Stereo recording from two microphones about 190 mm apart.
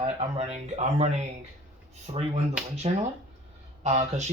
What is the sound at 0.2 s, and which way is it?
Speech, 35° right (ahead or behind).